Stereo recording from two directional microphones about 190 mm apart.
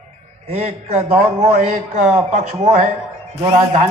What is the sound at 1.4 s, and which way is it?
Speech, 40° right (ahead or behind).